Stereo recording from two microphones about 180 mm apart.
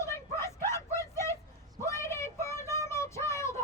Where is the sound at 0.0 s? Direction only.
15° left (ahead or behind).